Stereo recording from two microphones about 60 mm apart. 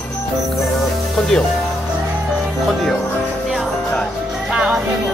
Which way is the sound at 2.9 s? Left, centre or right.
Left.